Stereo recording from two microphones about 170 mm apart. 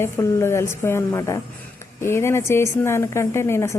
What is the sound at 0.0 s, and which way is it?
A woman's voice, 15° left (ahead or behind).